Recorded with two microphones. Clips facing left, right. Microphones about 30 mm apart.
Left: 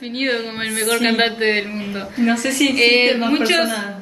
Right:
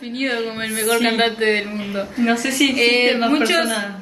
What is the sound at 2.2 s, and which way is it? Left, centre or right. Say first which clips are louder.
Speech: left 1 dB; centre.